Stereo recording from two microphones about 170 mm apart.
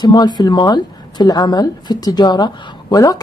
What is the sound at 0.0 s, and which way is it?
Speech, 25° left (ahead or behind).